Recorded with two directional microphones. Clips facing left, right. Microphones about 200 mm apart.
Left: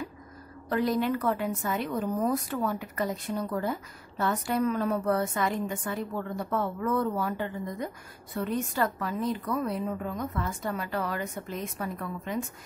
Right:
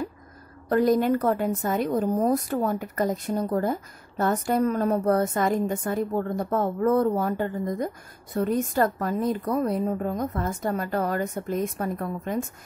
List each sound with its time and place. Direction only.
0.7 s a woman's voice: 45° right (ahead or behind)